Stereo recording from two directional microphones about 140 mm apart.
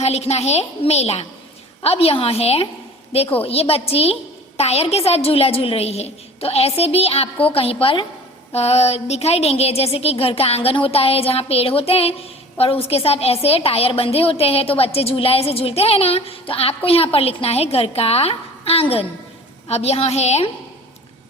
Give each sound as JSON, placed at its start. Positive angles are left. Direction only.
{"t": 0.0, "sound": "a woman's voice", "side_deg": 50}